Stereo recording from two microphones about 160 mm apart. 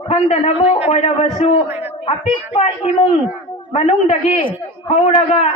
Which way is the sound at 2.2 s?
10° right (ahead or behind).